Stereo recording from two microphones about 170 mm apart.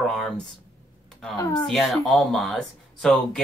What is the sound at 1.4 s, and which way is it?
Speech, 25° left (ahead or behind).